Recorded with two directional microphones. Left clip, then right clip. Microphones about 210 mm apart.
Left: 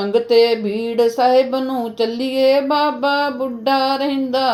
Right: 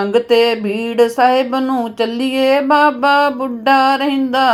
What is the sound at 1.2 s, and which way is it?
Music, 45° right (ahead or behind).